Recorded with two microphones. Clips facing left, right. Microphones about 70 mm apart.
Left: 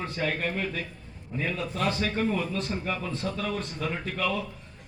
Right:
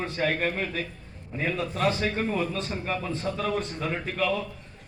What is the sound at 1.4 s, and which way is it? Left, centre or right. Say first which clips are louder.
Speech: right 3 dB; right.